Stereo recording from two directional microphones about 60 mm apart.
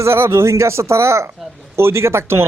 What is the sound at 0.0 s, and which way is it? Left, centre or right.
Speech, right.